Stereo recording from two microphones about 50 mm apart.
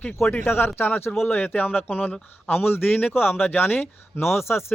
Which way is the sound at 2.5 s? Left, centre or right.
Left.